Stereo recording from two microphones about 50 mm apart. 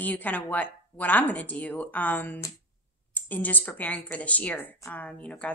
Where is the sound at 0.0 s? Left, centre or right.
Left.